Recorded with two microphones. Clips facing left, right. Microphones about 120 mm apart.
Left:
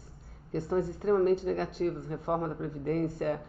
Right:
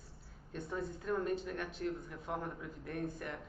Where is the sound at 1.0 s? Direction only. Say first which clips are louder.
Left 11 dB; 55° left (ahead or behind).